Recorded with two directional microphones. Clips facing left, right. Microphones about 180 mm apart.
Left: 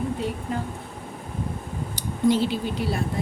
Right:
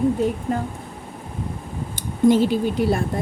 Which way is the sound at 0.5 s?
45° right (ahead or behind).